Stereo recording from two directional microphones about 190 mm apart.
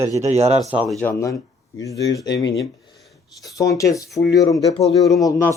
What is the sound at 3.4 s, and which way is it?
Speech, 20° left (ahead or behind).